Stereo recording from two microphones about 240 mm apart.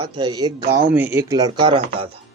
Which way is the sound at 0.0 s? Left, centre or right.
Centre.